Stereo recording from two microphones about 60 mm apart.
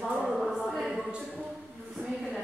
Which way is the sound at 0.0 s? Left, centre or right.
Centre.